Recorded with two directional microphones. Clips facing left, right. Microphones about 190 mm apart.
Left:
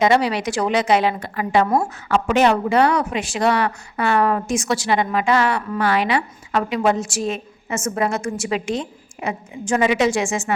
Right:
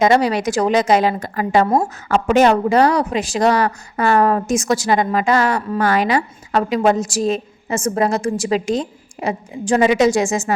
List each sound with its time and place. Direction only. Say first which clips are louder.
0.0 s speech: right 3 dB; 45° right (ahead or behind)